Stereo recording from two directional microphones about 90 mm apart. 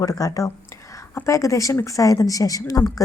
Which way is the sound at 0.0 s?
40° left (ahead or behind).